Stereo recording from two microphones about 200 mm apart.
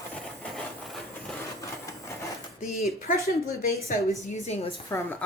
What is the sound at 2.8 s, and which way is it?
A woman's voice, 45° left (ahead or behind).